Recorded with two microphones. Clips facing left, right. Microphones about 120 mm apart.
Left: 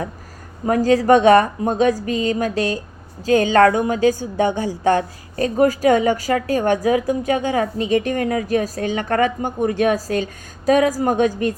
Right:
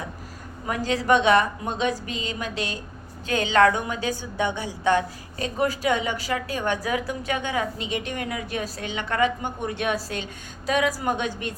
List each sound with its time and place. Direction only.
0.6 s a woman's voice: 40° left (ahead or behind)